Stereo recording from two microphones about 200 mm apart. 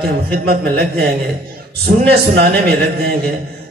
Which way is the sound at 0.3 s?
50° right (ahead or behind).